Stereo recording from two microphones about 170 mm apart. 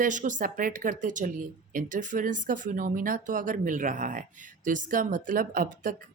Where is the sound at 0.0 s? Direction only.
50° right (ahead or behind).